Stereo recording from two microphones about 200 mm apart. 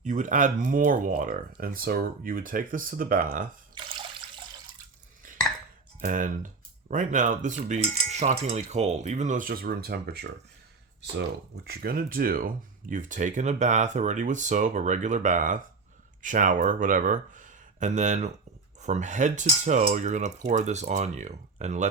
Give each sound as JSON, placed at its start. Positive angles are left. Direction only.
{"t": 0.0, "sound": "speech", "side_deg": -40}
{"t": 6.0, "sound": "speech", "side_deg": -40}
{"t": 11.6, "sound": "speech", "side_deg": -50}